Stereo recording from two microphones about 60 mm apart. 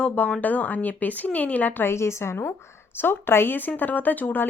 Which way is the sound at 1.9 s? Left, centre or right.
Left.